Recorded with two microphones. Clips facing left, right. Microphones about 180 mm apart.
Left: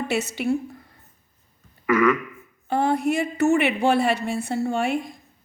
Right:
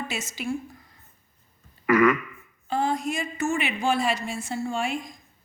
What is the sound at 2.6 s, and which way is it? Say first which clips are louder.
A woman's voice: left 5 dB; 60° left (ahead or behind).